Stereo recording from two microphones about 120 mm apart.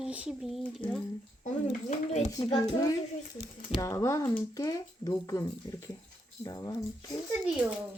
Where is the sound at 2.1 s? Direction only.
65° left (ahead or behind).